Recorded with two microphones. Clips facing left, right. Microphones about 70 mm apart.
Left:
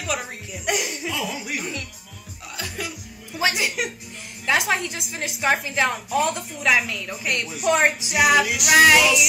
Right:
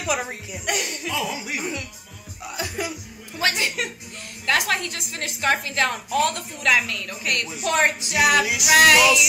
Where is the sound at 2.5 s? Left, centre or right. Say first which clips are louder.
Right 3 dB; centre.